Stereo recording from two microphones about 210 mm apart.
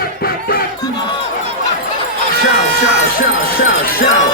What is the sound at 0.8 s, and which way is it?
Crowd, 20° left (ahead or behind).